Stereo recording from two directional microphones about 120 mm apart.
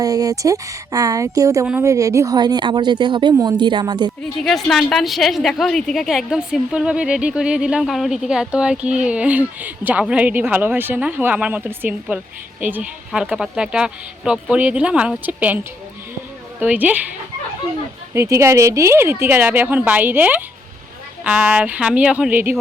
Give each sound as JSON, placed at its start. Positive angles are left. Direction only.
{"t": 0.0, "sound": "speech", "side_deg": -30}
{"t": 4.4, "sound": "a woman's voice", "side_deg": 0}
{"t": 18.1, "sound": "a woman's voice", "side_deg": -25}